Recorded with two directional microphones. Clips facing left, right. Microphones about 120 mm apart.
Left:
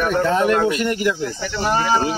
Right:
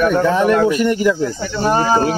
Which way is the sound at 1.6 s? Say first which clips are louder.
Right 4 dB; 35° right (ahead or behind).